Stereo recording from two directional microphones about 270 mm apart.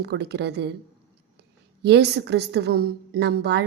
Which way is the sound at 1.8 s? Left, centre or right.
Right.